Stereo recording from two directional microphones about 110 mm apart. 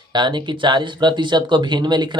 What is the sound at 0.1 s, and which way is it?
Speech, 45° right (ahead or behind).